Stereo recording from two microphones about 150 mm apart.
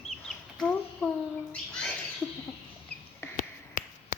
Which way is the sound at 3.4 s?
60° left (ahead or behind).